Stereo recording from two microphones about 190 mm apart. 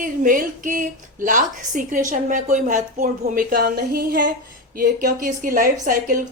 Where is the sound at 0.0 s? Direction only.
45° right (ahead or behind).